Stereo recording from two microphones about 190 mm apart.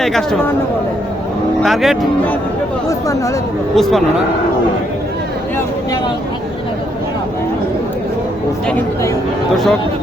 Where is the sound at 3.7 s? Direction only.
Centre (ahead or behind).